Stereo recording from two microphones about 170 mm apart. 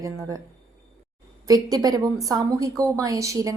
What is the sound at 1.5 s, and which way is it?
A woman's voice, 20° right (ahead or behind).